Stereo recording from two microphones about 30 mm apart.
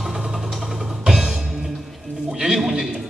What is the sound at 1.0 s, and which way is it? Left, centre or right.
Music, centre.